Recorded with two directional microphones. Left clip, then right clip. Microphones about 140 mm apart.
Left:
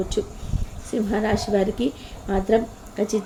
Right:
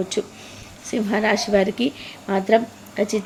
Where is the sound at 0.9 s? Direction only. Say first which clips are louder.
Right 3 dB; 20° right (ahead or behind).